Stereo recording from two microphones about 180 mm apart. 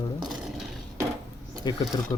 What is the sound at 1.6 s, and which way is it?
Speech, 25° left (ahead or behind).